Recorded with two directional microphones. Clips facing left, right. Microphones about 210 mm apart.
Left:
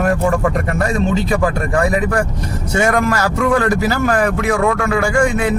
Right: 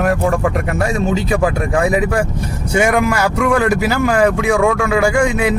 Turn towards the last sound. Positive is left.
turn(degrees=-15)  # may be behind; listen again after turning